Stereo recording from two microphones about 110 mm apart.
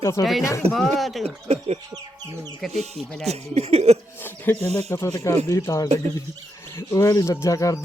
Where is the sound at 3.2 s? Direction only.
70° right (ahead or behind).